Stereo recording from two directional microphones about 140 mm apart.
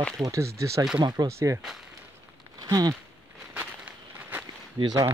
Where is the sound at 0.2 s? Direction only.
20° right (ahead or behind).